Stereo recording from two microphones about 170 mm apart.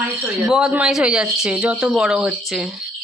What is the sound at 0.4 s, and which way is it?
Speech, 5° right (ahead or behind).